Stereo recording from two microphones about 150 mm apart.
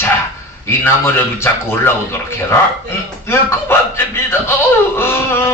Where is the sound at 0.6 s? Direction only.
15° left (ahead or behind).